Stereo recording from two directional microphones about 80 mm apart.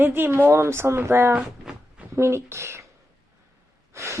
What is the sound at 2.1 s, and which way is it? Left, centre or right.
Speech, right.